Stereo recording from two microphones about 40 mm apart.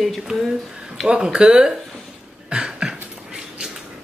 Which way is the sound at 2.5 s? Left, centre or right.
Centre.